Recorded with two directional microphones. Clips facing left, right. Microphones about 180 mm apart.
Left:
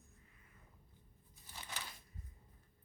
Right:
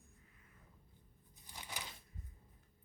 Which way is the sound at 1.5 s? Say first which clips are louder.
Right 1 dB; 15° right (ahead or behind).